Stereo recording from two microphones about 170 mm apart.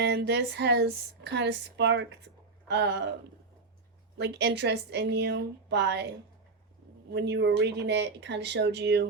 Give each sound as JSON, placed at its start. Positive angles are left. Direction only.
{"t": 0.0, "sound": "speech", "side_deg": -90}
{"t": 4.2, "sound": "a woman's voice", "side_deg": -85}
{"t": 7.1, "sound": "speech", "side_deg": -85}